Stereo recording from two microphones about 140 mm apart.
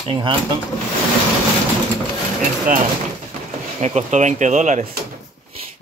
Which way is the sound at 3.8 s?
55° right (ahead or behind).